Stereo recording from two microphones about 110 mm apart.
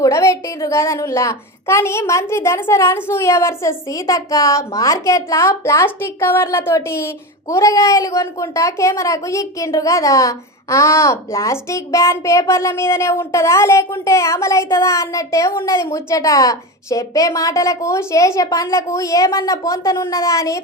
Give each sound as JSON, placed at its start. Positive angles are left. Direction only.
{"t": 0.0, "sound": "a woman's voice", "side_deg": 30}